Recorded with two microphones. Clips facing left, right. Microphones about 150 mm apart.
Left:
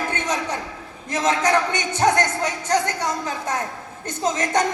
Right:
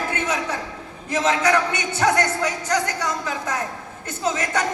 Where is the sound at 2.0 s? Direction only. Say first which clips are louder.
Left 1 dB; 30° left (ahead or behind).